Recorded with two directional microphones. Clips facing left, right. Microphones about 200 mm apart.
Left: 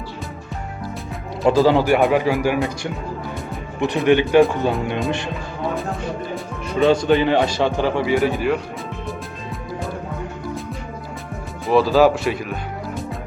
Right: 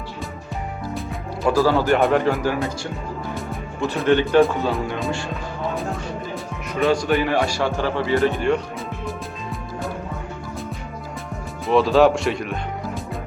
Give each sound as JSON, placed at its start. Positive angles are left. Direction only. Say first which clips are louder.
{"t": 1.5, "sound": "speech", "louder": "left 3 dB", "side_deg": 20}
{"t": 2.0, "sound": "speech", "louder": "left 1 dB", "side_deg": 5}
{"t": 3.8, "sound": "speech", "louder": "left 2 dB", "side_deg": 15}
{"t": 5.7, "sound": "music", "louder": "left 2 dB", "side_deg": 0}
{"t": 6.7, "sound": "speech", "louder": "left 4 dB", "side_deg": 25}
{"t": 8.3, "sound": "speech", "louder": "even", "side_deg": 5}
{"t": 11.6, "sound": "speech", "louder": "left 1 dB", "side_deg": 0}